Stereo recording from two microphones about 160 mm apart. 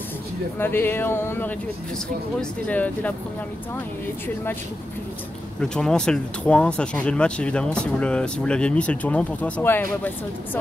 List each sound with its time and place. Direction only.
0.6 s speech: 15° left (ahead or behind)
2.6 s speech: 10° left (ahead or behind)
5.6 s speech: 5° left (ahead or behind)